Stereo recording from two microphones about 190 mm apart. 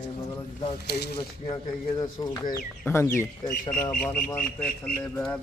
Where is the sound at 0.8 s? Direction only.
60° left (ahead or behind).